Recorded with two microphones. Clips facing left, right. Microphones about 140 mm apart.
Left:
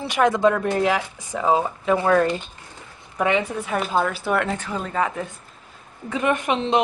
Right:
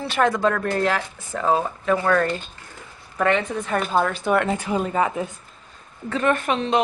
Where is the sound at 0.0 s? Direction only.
15° left (ahead or behind); by 4.6 s centre (ahead or behind).